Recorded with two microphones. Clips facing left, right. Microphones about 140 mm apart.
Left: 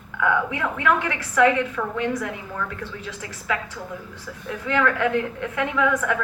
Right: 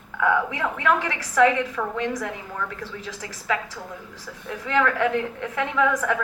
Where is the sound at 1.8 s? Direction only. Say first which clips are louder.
Even; 20° right (ahead or behind).